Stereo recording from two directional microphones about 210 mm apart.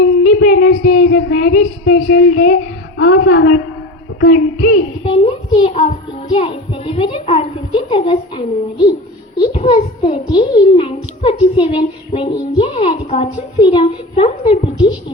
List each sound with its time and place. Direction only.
0.0 s a sound: 40° left (ahead or behind)
0.9 s child singing: 65° left (ahead or behind)
1.3 s child singing: 40° left (ahead or behind)
3.0 s a woman's voice: 45° left (ahead or behind)
5.0 s a child's voice: 25° left (ahead or behind)